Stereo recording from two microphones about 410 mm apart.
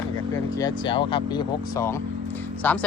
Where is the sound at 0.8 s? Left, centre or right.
Centre.